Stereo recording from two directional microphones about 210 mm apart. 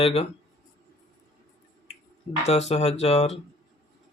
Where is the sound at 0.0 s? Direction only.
30° left (ahead or behind).